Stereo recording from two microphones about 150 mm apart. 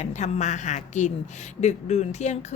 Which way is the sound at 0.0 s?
50° left (ahead or behind).